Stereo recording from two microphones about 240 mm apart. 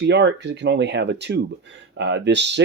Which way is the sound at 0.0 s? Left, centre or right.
Right.